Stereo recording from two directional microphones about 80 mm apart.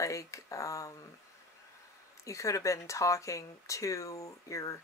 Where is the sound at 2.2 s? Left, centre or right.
Left.